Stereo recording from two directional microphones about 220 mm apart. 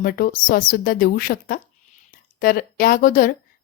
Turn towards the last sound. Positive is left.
turn(degrees=40)  # may be behind; listen again after turning